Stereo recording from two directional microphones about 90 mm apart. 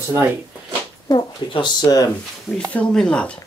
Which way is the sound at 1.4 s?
60° left (ahead or behind).